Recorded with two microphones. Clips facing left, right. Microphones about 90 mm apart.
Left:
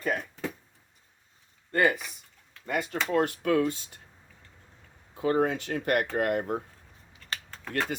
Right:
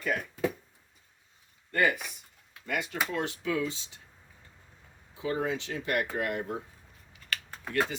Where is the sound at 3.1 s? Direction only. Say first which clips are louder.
Left 9 dB; 50° left (ahead or behind).